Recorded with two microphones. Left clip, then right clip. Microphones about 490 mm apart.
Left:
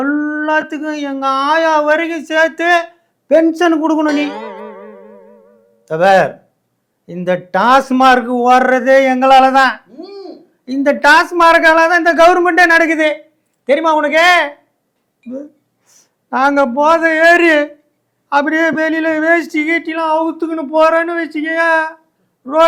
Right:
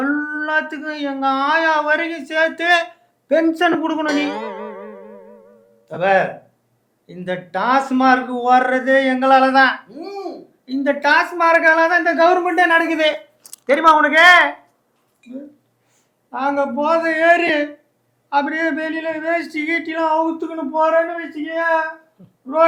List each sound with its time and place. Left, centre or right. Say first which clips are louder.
0.0 s speech: left 4 dB; left
4.0 s music: left 4 dB; centre
5.8 s a man's voice: left 6 dB; left
10.7 s a man's voice: left 7 dB; left
13.7 s a man's voice: even; left
16.3 s a man's voice: left 7 dB; left